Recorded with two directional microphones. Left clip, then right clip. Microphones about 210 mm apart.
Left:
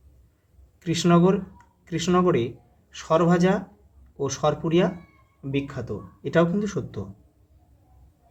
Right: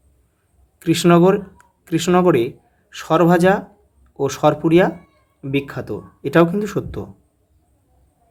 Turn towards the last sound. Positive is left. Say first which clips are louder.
# right 6 dB
turn(degrees=-40)  # may be behind; listen again after turning